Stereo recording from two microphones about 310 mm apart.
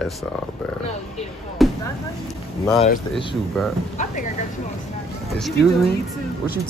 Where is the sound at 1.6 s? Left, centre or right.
Centre.